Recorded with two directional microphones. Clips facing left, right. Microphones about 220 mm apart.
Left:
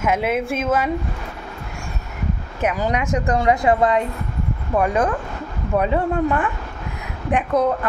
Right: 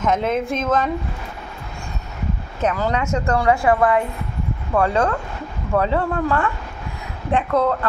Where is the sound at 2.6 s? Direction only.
15° left (ahead or behind).